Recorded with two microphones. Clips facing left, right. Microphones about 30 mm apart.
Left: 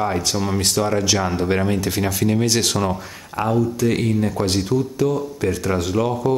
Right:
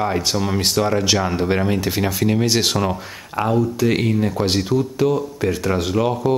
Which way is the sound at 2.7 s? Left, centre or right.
Centre.